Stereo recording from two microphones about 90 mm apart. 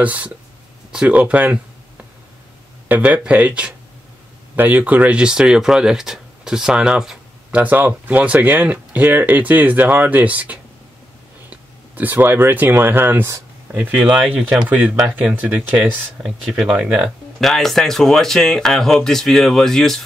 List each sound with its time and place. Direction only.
0.0 s speech: 15° right (ahead or behind)
2.9 s speech: 15° right (ahead or behind)
17.4 s speech: centre (ahead or behind)